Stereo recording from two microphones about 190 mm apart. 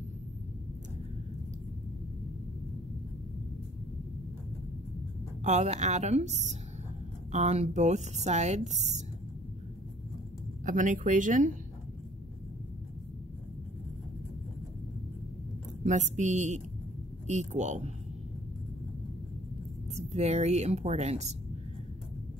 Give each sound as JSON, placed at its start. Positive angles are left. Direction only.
{"t": 5.4, "sound": "speech", "side_deg": -35}
{"t": 10.6, "sound": "speech", "side_deg": -40}
{"t": 15.8, "sound": "speech", "side_deg": -40}
{"t": 20.0, "sound": "speech", "side_deg": -35}